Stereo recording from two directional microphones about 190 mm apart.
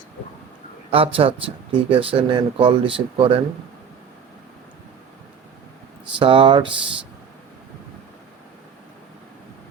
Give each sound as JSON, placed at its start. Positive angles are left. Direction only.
{"t": 0.9, "sound": "speech", "side_deg": -30}
{"t": 6.1, "sound": "speech", "side_deg": -30}